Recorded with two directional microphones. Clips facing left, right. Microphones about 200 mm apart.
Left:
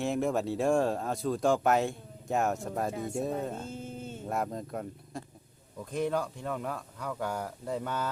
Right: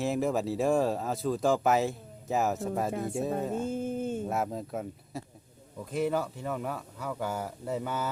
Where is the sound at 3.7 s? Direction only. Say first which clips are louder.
Right 9 dB; 50° right (ahead or behind).